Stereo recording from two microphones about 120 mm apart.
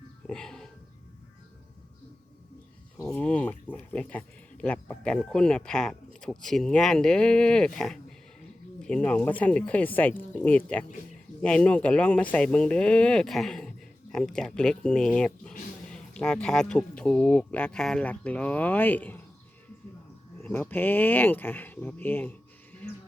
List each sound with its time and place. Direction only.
0.3 s music: 5° left (ahead or behind)
3.1 s speech: 15° left (ahead or behind)
20.4 s speech: 15° left (ahead or behind)